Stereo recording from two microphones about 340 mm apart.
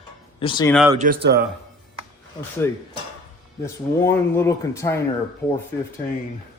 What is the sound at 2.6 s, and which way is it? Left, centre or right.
Speech, centre.